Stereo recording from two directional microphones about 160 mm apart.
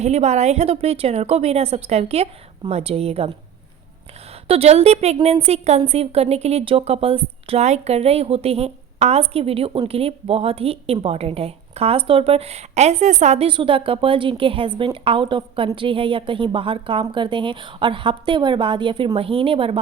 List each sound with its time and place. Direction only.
0.0 s a woman's voice: 45° right (ahead or behind)
4.4 s a woman's voice: 40° right (ahead or behind)
13.5 s a woman's voice: 35° right (ahead or behind)